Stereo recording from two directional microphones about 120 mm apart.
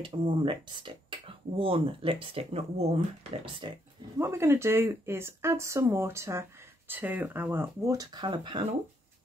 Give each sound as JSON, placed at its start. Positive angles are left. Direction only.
{"t": 0.0, "sound": "speech", "side_deg": -45}
{"t": 3.6, "sound": "speech", "side_deg": -40}
{"t": 4.2, "sound": "speech", "side_deg": -20}
{"t": 7.9, "sound": "speech", "side_deg": -35}